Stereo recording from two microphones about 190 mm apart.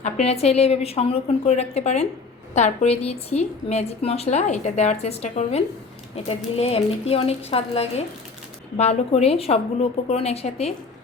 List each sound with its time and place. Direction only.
0.0 s a woman's voice: 35° left (ahead or behind)